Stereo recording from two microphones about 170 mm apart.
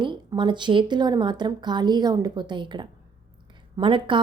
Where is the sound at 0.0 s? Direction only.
25° right (ahead or behind).